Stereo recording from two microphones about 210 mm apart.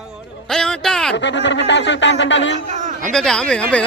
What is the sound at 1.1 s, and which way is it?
Speech, 55° left (ahead or behind).